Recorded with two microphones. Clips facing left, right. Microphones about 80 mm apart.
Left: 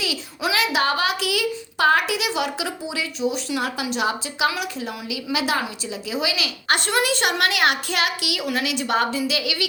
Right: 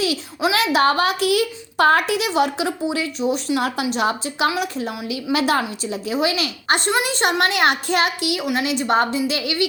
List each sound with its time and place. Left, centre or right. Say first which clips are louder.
0.5 s a woman's voice: right 4 dB; right
4.8 s a woman's voice: right 3 dB; right
6.7 s a woman's voice: right 1 dB; right